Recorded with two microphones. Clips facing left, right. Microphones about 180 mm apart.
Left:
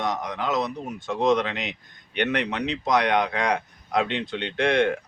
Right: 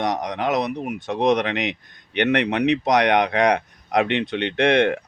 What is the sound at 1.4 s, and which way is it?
Speech, 70° right (ahead or behind).